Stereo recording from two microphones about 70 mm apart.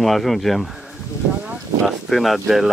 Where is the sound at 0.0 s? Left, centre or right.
Centre.